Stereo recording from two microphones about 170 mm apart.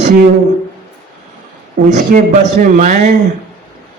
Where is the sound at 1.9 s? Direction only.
45° right (ahead or behind).